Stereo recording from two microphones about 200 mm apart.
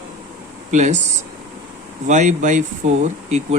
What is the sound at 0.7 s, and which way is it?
Speech, 35° right (ahead or behind).